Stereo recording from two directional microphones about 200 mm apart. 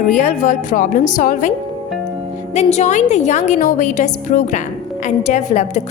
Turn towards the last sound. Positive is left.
turn(degrees=35)  # may be behind; listen again after turning